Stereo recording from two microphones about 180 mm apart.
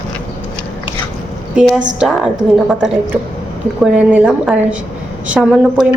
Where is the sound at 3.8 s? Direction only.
5° right (ahead or behind).